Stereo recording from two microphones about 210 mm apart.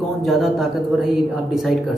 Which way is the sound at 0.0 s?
Centre (ahead or behind).